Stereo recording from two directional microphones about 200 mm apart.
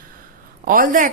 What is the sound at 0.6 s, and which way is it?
Speech, 45° right (ahead or behind).